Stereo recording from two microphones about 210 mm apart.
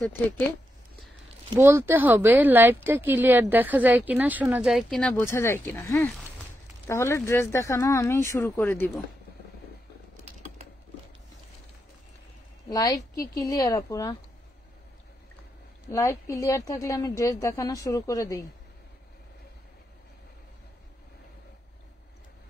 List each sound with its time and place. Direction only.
1.5 s a woman's voice: 15° right (ahead or behind); by 9.0 s 5° left (ahead or behind)
10.1 s typing: 40° right (ahead or behind)
12.6 s a woman's voice: 15° left (ahead or behind)
15.9 s a woman's voice: 15° left (ahead or behind)